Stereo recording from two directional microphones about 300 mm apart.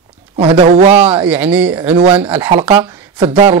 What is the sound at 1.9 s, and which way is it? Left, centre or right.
Speech, centre.